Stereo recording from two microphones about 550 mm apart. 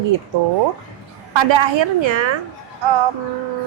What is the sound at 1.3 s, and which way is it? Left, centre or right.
A woman's voice, right.